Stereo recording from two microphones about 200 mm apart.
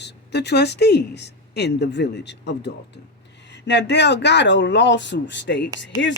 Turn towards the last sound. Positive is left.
turn(degrees=65)  # may be behind; listen again after turning